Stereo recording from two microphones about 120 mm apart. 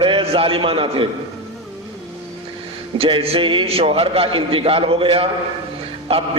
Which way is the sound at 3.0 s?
50° right (ahead or behind).